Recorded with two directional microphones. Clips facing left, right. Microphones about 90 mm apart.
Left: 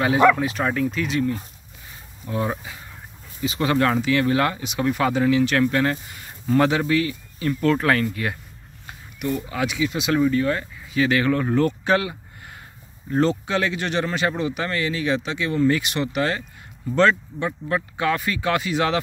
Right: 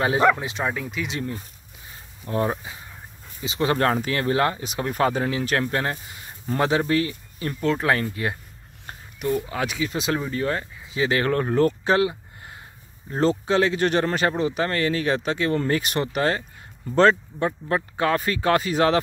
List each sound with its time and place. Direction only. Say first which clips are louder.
0.0 s speech: left 3 dB; 30° right (ahead or behind)
0.7 s speech: left 4 dB; 10° right (ahead or behind)
1.0 s speech: left 7 dB; 25° right (ahead or behind)
2.3 s speech: right 2 dB; 45° right (ahead or behind)
3.4 s speech: left 1 dB; 25° right (ahead or behind)
3.7 s speech: left 4 dB; 35° right (ahead or behind)
7.7 s speech: left 2 dB; 20° right (ahead or behind); by 18.9 s 35° right (ahead or behind)